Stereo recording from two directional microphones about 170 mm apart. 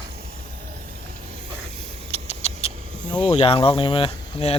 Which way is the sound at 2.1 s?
40° left (ahead or behind).